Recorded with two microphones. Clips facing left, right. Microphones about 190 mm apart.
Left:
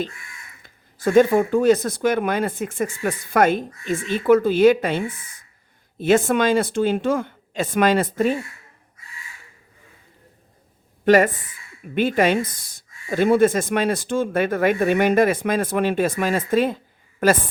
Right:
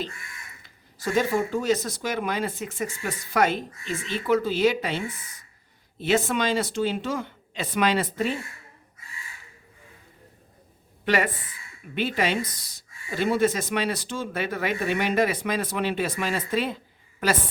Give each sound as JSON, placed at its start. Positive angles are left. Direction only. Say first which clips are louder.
{"t": 0.6, "sound": "speech", "louder": "left 9 dB", "side_deg": 55}
{"t": 11.0, "sound": "speech", "louder": "left 9 dB", "side_deg": 45}